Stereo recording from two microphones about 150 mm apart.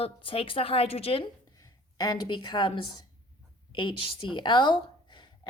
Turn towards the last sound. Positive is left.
turn(degrees=30)  # may be behind; listen again after turning